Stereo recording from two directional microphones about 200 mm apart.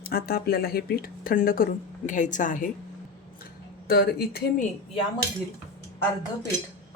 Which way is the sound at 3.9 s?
50° left (ahead or behind).